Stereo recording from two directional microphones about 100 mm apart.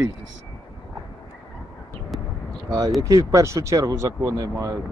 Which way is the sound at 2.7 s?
35° right (ahead or behind).